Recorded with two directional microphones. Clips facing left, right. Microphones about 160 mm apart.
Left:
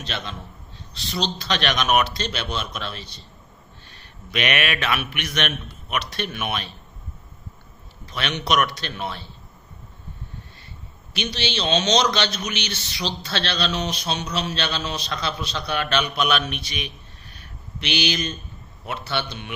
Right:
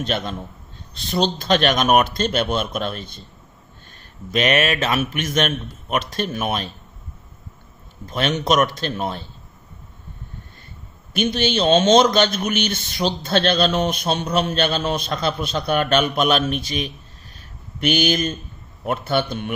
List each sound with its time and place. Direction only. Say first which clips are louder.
0.0 s a man's voice: right 8 dB; 50° right (ahead or behind)
4.3 s a man's voice: right 6 dB; 40° right (ahead or behind)
8.0 s a man's voice: right 6 dB; 45° right (ahead or behind)
11.1 s a man's voice: right 7 dB; 50° right (ahead or behind)